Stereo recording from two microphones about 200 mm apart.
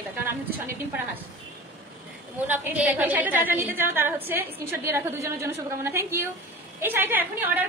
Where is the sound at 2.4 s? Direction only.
10° right (ahead or behind).